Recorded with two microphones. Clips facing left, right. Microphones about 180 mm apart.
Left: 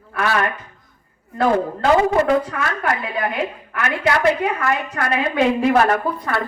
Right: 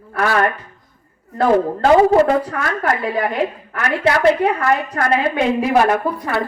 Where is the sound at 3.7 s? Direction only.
35° right (ahead or behind).